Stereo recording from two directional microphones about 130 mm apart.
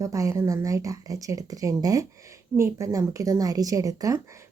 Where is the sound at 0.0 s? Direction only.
25° right (ahead or behind).